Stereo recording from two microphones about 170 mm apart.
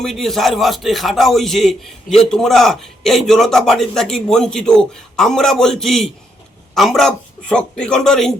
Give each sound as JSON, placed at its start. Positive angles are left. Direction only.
{"t": 0.0, "sound": "a man's voice", "side_deg": 0}